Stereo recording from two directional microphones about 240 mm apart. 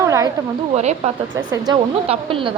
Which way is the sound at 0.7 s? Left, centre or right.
Right.